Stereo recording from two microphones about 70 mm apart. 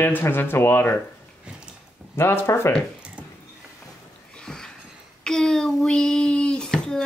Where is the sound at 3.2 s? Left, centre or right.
Centre.